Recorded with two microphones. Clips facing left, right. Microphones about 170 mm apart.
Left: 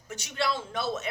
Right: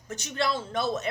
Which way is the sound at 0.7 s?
5° left (ahead or behind).